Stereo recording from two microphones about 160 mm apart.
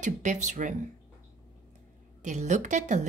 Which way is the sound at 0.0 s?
50° right (ahead or behind).